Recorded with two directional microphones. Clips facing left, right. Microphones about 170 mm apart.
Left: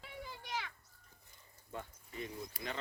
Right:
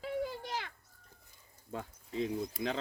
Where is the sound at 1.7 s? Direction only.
90° right.